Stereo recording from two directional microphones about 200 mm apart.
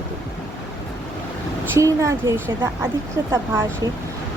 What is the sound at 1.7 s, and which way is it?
A woman's voice, 15° right (ahead or behind).